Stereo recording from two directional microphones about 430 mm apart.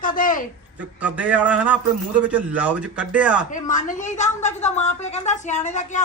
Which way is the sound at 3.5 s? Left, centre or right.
Centre.